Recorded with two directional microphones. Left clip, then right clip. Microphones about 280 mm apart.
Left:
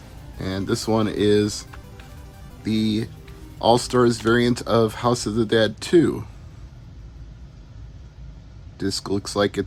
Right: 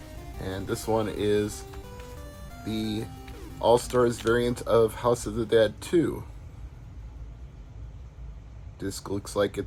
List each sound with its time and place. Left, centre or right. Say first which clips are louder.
0.4 s speech: left 6 dB; left
2.6 s speech: left 8 dB; left
8.8 s speech: left 8 dB; left